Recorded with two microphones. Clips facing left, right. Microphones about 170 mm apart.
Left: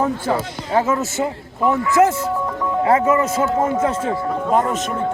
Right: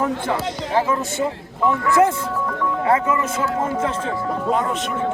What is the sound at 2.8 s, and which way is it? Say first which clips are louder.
Speech: left 4 dB; 25° left (ahead or behind).